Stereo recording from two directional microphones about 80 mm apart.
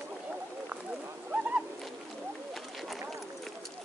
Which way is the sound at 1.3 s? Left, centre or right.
Centre.